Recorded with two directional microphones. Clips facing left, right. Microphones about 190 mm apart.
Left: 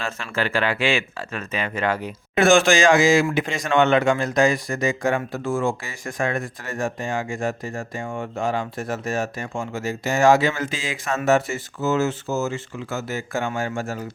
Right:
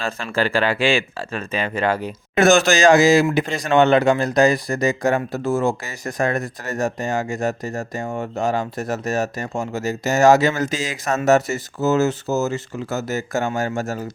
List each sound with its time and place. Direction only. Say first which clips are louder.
0.0 s speech: right 4 dB; 35° right (ahead or behind)